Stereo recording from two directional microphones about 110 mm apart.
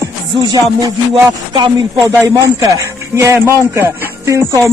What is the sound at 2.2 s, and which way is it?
Speech, 25° right (ahead or behind).